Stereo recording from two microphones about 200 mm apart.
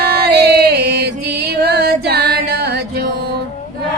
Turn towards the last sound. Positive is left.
turn(degrees=-55)  # may be behind; listen again after turning